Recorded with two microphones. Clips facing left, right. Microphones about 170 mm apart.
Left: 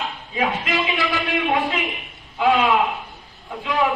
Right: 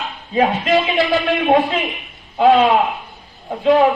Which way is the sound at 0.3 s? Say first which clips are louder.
Right 8 dB; 40° right (ahead or behind).